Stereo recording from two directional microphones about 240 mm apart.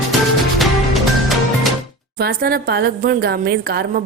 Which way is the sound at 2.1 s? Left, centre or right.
Right.